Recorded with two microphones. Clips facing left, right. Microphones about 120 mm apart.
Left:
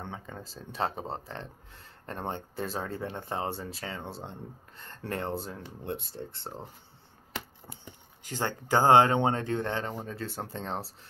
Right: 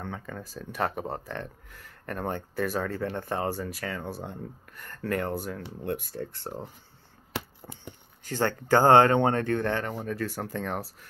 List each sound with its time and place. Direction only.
0.0 s speech: 20° left (ahead or behind)
8.2 s speech: 15° left (ahead or behind)